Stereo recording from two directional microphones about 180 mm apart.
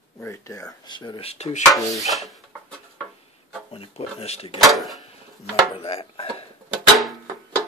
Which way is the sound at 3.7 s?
35° left (ahead or behind).